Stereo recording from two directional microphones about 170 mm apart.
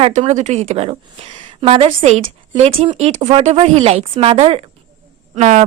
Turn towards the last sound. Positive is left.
turn(degrees=-45)  # may be behind; listen again after turning